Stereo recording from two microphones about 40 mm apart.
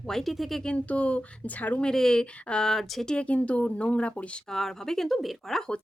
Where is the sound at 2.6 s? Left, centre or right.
Centre.